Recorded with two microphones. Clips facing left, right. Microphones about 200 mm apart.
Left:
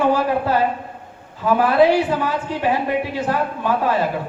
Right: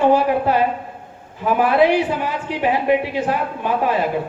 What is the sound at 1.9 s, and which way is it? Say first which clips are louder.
A woman's voice: left 1 dB; 15° right (ahead or behind).